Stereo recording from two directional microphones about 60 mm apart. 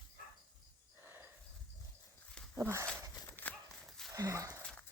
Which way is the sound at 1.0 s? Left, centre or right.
Right.